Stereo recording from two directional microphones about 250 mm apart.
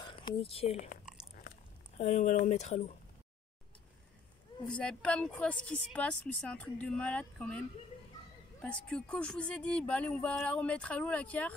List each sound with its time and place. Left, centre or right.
0.0 s speech: centre
1.1 s biting: centre
2.0 s speech: left
4.7 s speech: centre
8.6 s speech: centre